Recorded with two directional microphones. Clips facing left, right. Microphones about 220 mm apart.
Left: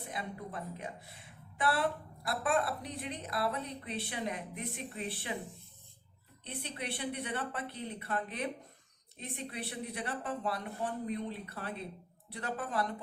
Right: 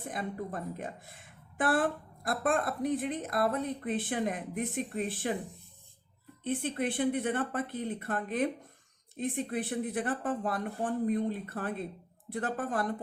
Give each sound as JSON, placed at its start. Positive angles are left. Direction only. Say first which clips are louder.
{"t": 0.1, "sound": "a woman's voice", "louder": "right 6 dB", "side_deg": -45}
{"t": 6.4, "sound": "a woman's voice", "louder": "right 10 dB", "side_deg": -50}